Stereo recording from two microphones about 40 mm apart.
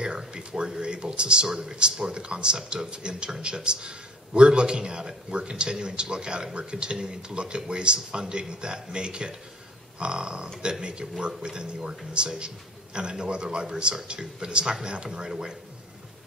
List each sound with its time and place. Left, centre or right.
0.0 s speech: right